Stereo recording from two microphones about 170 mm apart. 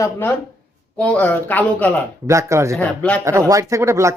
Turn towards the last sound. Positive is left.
turn(degrees=-15)  # may be behind; listen again after turning